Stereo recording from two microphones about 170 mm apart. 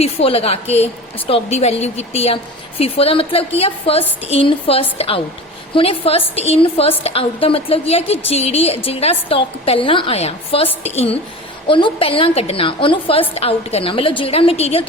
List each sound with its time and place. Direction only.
0.0 s a woman's voice: 35° left (ahead or behind)